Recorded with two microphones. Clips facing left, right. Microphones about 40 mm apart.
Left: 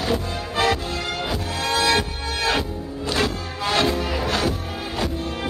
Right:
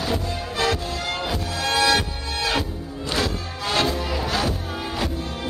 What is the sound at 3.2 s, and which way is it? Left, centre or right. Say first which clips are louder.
Music: left 2 dB; centre.